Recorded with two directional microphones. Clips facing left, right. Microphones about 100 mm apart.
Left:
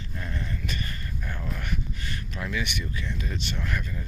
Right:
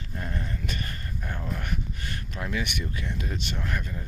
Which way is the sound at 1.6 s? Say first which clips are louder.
Even; 40° right (ahead or behind).